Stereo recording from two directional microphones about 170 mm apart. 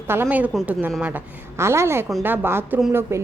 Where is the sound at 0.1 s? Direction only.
10° right (ahead or behind).